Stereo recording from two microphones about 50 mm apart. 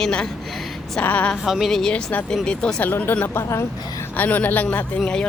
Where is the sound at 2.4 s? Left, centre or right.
Centre.